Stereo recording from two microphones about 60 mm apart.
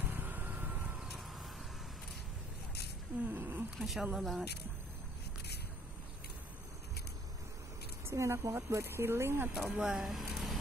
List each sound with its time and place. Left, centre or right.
0.0 s vehicle: right
0.9 s vehicle: centre
3.3 s speech: right
3.7 s speech: centre
8.1 s speech: right
9.5 s speech: centre
10.3 s a sound: centre